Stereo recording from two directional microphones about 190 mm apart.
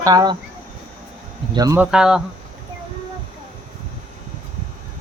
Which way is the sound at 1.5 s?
15° right (ahead or behind).